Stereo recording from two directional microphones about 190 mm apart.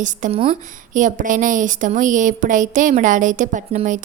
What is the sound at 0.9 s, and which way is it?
A woman's voice, 45° right (ahead or behind).